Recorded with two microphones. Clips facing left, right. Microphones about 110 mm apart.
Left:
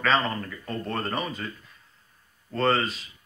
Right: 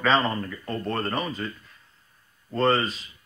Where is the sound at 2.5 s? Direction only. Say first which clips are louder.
Right 2 dB; 10° right (ahead or behind).